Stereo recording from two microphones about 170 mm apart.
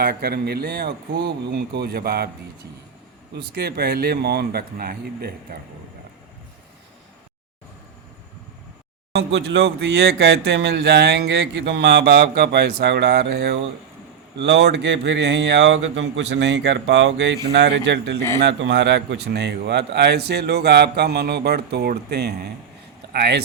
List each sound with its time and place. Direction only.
0.0 s speech: 65° right (ahead or behind)
3.3 s speech: 70° right (ahead or behind)
9.1 s speech: 85° right
14.3 s speech: 90° right; by 23.4 s 75° right (ahead or behind)